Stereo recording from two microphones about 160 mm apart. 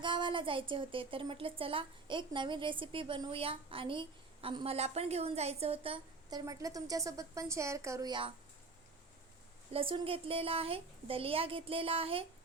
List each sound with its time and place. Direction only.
0.0 s a sound: 30° right (ahead or behind)
0.7 s a woman's voice: 35° right (ahead or behind)
6.4 s a woman's voice: 20° right (ahead or behind)
9.7 s a woman's voice: 35° right (ahead or behind)